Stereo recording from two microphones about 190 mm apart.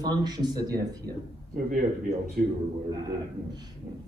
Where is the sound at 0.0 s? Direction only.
20° right (ahead or behind).